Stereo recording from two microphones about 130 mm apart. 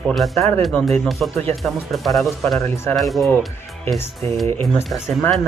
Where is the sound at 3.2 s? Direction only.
15° left (ahead or behind).